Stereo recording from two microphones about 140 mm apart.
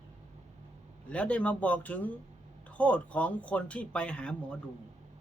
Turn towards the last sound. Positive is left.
turn(degrees=5)  # may be behind; listen again after turning